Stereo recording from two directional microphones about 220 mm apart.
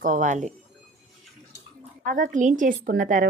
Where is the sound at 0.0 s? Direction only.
35° right (ahead or behind).